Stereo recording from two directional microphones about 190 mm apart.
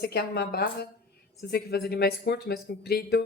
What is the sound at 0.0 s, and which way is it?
A woman's voice, 55° left (ahead or behind).